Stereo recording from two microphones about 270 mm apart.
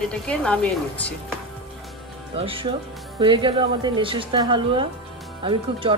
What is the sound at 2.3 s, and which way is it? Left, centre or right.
Speech, centre.